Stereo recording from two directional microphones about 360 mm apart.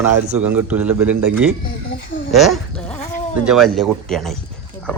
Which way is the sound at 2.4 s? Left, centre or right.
Centre.